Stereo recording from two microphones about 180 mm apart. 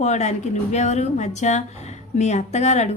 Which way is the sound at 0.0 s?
40° left (ahead or behind).